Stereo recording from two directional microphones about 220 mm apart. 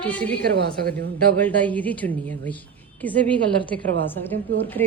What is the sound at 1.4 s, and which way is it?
A woman's voice, 5° left (ahead or behind).